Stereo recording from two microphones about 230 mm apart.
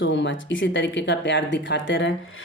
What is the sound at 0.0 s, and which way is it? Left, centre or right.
Speech, left.